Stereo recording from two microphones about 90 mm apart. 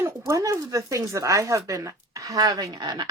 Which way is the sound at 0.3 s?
35° right (ahead or behind).